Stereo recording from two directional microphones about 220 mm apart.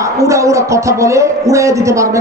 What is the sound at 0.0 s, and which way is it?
Speech, 15° right (ahead or behind).